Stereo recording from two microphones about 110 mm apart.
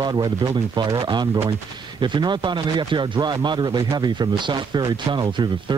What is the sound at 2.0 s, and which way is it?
A man's voice, 45° right (ahead or behind).